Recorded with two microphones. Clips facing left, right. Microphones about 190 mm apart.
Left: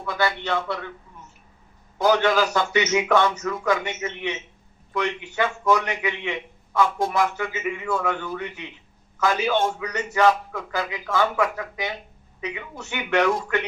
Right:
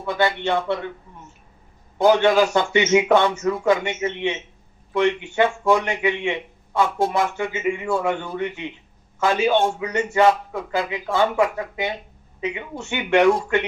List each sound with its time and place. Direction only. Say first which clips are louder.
0.0 s a man's voice: right 4 dB; 25° right (ahead or behind)
2.0 s a man's voice: right 4 dB; 25° right (ahead or behind)